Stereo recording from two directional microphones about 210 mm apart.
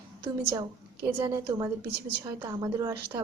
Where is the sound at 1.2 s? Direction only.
15° right (ahead or behind).